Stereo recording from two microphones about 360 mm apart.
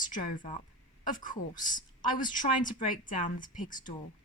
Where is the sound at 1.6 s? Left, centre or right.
Left.